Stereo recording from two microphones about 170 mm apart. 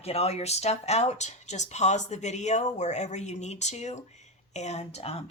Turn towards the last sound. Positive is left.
turn(degrees=40)  # may be behind; listen again after turning